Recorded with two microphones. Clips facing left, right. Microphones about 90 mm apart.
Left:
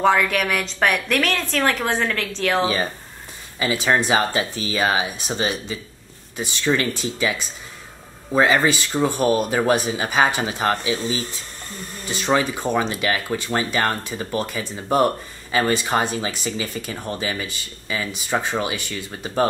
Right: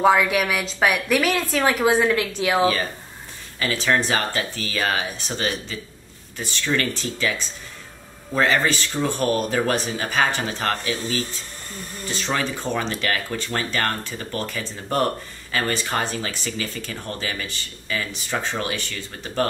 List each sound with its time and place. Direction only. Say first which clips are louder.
0.0 s a woman's voice: right 1 dB; 5° right (ahead or behind)
3.5 s speech: left 2 dB; 15° left (ahead or behind)